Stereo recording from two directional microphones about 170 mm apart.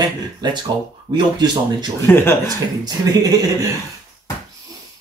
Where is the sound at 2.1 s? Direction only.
15° left (ahead or behind).